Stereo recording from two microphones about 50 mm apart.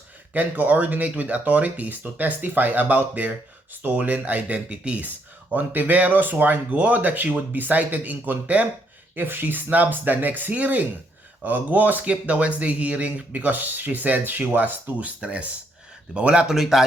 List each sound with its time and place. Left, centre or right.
0.3 s speech: right
9.1 s speech: right
16.6 s speech: centre